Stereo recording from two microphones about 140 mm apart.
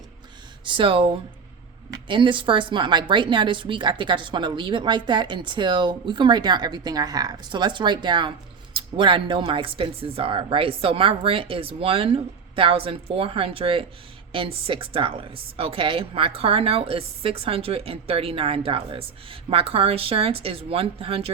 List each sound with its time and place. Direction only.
0.6 s a woman's voice: 35° right (ahead or behind)